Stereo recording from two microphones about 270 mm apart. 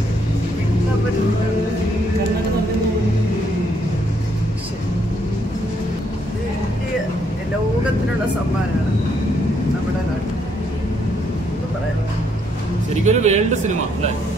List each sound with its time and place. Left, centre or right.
13.0 s speech: right